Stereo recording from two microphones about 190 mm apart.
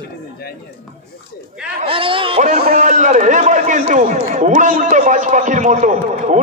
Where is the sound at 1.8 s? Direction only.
30° right (ahead or behind).